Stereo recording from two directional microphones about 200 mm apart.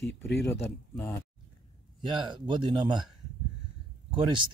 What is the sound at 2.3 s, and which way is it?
Speech, 20° right (ahead or behind).